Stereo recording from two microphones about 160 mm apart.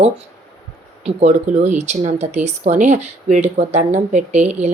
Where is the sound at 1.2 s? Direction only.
45° right (ahead or behind).